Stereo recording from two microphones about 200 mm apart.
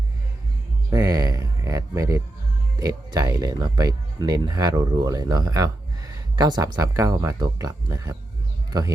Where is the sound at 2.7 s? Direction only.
20° right (ahead or behind).